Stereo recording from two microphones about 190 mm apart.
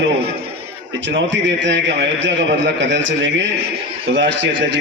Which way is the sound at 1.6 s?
70° right (ahead or behind).